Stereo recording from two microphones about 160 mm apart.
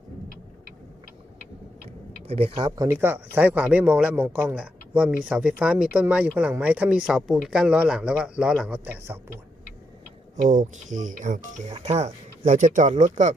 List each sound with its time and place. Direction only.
2.2 s speech: 35° right (ahead or behind)
2.8 s speech: 15° right (ahead or behind)
10.3 s speech: 50° right (ahead or behind)